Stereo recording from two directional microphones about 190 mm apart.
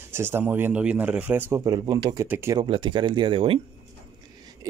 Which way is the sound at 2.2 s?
10° right (ahead or behind).